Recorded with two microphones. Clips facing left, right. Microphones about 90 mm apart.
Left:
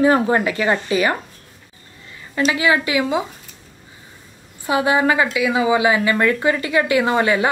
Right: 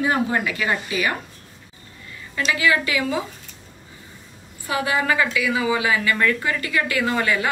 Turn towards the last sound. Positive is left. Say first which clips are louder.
# left 5 dB
turn(degrees=25)  # may be behind; listen again after turning